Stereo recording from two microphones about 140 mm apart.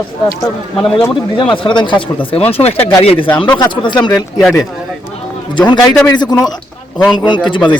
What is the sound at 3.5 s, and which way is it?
Speech, 35° left (ahead or behind).